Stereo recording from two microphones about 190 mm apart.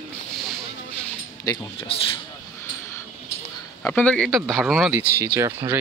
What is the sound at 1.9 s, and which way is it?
Speech, 30° left (ahead or behind).